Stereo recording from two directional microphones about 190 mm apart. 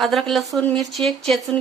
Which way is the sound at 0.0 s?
Centre (ahead or behind).